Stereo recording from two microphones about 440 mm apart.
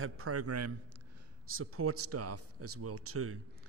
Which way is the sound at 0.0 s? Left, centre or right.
Right.